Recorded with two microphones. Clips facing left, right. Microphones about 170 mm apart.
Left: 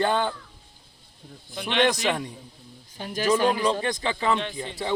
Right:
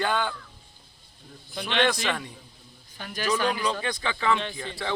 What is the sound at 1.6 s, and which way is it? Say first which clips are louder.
A man's voice: left 2 dB; 15° left (ahead or behind).